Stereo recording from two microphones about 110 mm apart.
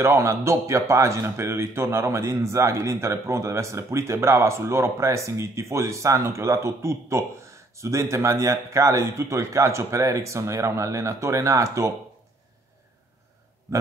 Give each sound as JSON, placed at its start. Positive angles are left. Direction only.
{"t": 0.0, "sound": "a man's voice", "side_deg": -25}